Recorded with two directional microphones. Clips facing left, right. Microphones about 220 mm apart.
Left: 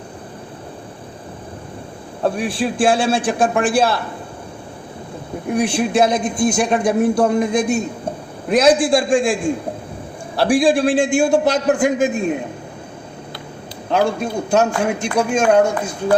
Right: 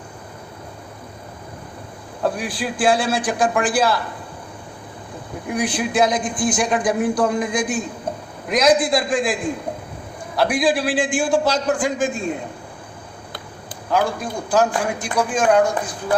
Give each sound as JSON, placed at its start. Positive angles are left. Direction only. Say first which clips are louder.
{"t": 2.2, "sound": "a man's voice", "louder": "left 4 dB", "side_deg": 25}
{"t": 5.5, "sound": "a man's voice", "louder": "left 3 dB", "side_deg": 25}
{"t": 10.8, "sound": "a man's voice", "louder": "left 5 dB", "side_deg": 45}
{"t": 11.3, "sound": "a man's voice", "louder": "left 3 dB", "side_deg": 20}
{"t": 13.9, "sound": "a man's voice", "louder": "left 3 dB", "side_deg": 25}